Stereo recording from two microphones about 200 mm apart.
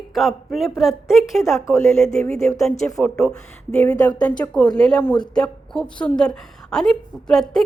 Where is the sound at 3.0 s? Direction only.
5° left (ahead or behind).